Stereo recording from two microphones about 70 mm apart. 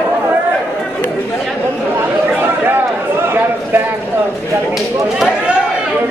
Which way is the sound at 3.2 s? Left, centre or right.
Right.